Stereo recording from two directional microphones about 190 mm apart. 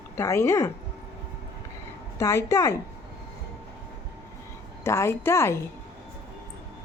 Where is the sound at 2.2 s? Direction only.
15° left (ahead or behind).